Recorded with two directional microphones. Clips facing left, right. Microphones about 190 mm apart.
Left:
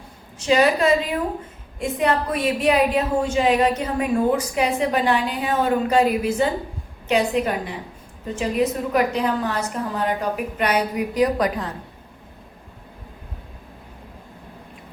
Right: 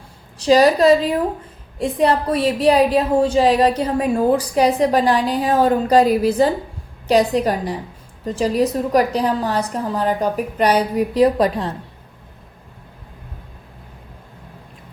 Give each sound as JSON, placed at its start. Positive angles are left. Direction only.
{"t": 0.3, "sound": "a woman's voice", "side_deg": -35}